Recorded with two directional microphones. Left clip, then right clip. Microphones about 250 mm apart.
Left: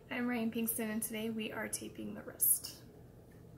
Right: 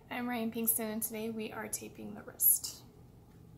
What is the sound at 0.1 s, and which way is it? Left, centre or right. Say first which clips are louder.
A woman's voice: even; right.